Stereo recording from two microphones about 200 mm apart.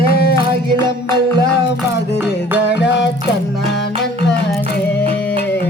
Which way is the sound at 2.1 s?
10° right (ahead or behind).